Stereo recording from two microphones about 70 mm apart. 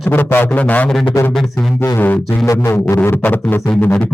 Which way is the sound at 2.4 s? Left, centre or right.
Left.